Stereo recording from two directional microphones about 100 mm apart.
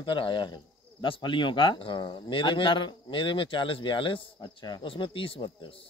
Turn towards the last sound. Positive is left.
turn(degrees=60)  # may be behind; listen again after turning